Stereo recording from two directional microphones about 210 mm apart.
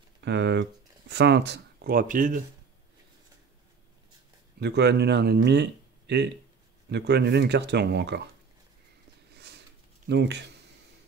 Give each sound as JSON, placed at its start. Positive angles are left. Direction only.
{"t": 0.2, "sound": "speech", "side_deg": -55}
{"t": 4.6, "sound": "speech", "side_deg": -55}
{"t": 10.0, "sound": "speech", "side_deg": -55}